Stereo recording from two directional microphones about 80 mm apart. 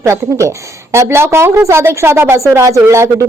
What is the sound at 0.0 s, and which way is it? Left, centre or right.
A woman's voice, right.